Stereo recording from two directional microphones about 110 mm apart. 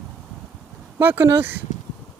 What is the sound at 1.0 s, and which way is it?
Speech, 20° right (ahead or behind).